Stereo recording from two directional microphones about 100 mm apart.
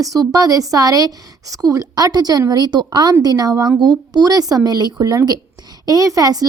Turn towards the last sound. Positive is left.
turn(degrees=-40)  # may be behind; listen again after turning